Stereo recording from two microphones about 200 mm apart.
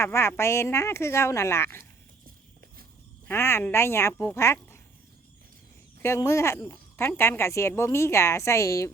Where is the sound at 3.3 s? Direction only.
10° left (ahead or behind).